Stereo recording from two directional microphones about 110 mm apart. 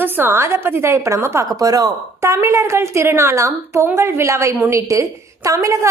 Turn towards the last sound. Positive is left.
turn(degrees=-30)  # may be behind; listen again after turning